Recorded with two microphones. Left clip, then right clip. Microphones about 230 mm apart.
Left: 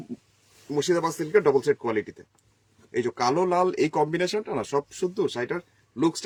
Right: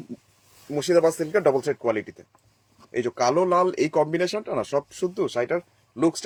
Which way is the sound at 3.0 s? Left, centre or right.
Centre.